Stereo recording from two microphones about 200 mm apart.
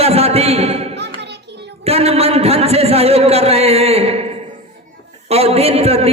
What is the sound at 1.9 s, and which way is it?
A man's voice, 30° right (ahead or behind).